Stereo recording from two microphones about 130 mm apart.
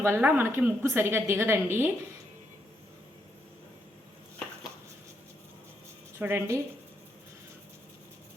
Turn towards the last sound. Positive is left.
turn(degrees=-15)  # may be behind; listen again after turning